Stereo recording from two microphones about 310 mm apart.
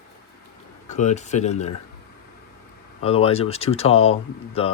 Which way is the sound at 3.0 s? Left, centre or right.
Centre.